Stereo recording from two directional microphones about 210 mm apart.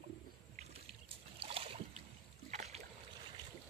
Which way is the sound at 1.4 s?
25° right (ahead or behind).